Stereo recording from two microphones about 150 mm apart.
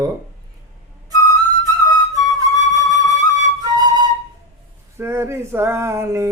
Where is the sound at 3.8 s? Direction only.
25° right (ahead or behind).